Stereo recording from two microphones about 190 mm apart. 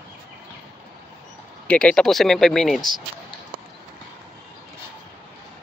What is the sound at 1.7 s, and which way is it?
Speech, 5° left (ahead or behind).